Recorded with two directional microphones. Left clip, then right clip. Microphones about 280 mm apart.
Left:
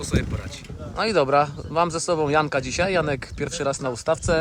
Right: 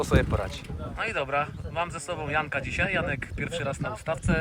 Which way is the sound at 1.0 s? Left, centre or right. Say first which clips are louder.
Left 9 dB; centre.